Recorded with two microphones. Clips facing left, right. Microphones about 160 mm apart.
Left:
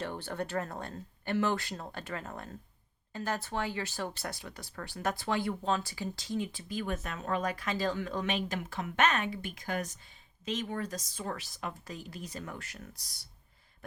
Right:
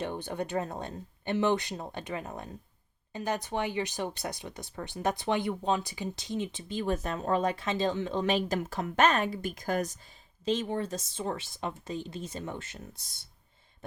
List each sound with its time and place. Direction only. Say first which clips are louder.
0.0 s speech: right 3 dB; 15° right (ahead or behind); by 9.9 s 40° right (ahead or behind)
10.4 s speech: right 5 dB; 30° right (ahead or behind)